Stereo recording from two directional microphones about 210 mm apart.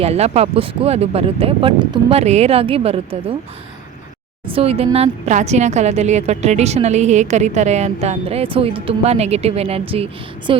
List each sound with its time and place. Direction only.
0.0 s speech: 30° right (ahead or behind)
4.4 s speech: 25° right (ahead or behind)